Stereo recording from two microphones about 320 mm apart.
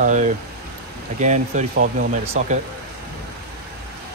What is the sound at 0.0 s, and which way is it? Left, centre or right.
Speech, right.